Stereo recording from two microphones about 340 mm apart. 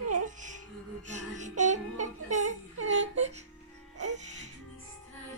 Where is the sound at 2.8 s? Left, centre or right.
Centre.